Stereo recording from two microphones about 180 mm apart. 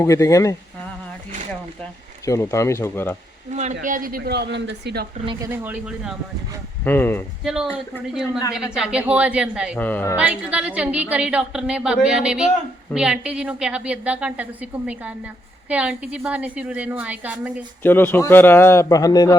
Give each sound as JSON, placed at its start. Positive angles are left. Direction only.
{"t": 0.0, "sound": "a man's voice", "side_deg": 15}
{"t": 2.2, "sound": "a man's voice", "side_deg": 15}
{"t": 3.5, "sound": "speech", "side_deg": -40}
{"t": 5.4, "sound": "a woman's voice", "side_deg": -10}
{"t": 6.8, "sound": "a man's voice", "side_deg": 10}
{"t": 7.4, "sound": "a woman's voice", "side_deg": -5}
{"t": 9.7, "sound": "a man's voice", "side_deg": 10}
{"t": 10.2, "sound": "a woman's voice", "side_deg": -5}
{"t": 17.8, "sound": "a man's voice", "side_deg": 10}